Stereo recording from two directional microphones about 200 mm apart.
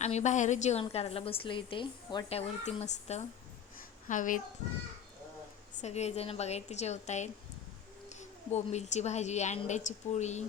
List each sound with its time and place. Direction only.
0.0 s a woman's voice: 35° left (ahead or behind)
5.8 s a woman's voice: 35° left (ahead or behind)